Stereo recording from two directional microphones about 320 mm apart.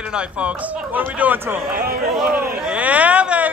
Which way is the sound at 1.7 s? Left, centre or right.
Right.